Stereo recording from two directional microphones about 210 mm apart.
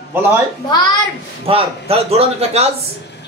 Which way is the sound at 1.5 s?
30° right (ahead or behind).